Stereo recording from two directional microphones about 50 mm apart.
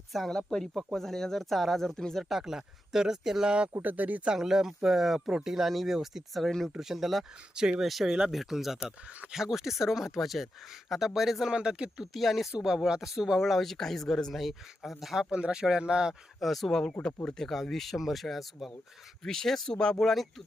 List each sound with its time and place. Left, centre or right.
0.3 s speech: centre
2.3 s speech: centre
3.8 s speech: right
4.4 s speech: centre
6.7 s speech: centre
7.5 s speech: centre
7.9 s speech: centre
11.5 s speech: centre
12.1 s speech: centre
15.3 s speech: centre
16.4 s speech: centre
16.9 s speech: centre
17.3 s speech: centre